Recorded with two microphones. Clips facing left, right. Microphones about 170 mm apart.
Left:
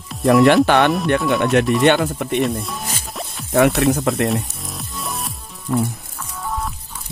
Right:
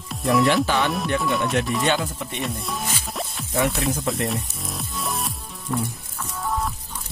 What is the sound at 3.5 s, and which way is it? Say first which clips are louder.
Speech: left 9 dB; 65° left (ahead or behind).